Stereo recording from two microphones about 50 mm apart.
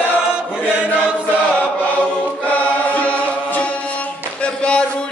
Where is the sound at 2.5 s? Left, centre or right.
Left.